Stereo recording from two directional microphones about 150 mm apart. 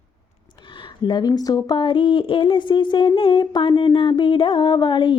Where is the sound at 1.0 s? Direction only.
30° left (ahead or behind).